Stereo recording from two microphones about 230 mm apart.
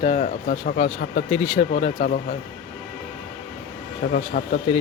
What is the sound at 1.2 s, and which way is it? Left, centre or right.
Speech, left.